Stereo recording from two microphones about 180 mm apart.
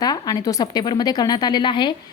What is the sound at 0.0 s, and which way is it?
A woman's voice, 20° left (ahead or behind).